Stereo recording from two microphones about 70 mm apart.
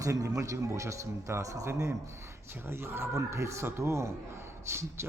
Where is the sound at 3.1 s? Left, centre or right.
Right.